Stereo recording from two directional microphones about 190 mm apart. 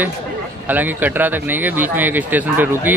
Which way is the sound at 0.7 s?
10° right (ahead or behind).